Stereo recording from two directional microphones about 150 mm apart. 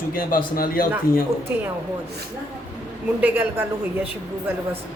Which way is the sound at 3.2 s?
15° right (ahead or behind).